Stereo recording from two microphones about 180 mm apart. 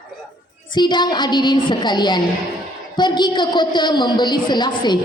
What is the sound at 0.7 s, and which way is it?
A woman's voice, 25° left (ahead or behind).